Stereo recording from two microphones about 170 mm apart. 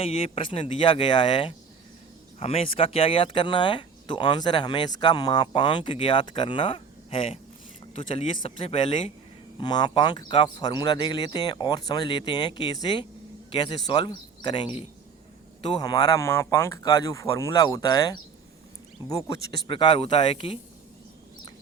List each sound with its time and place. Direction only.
0.0 s speech: 35° left (ahead or behind)
19.6 s speech: 30° left (ahead or behind)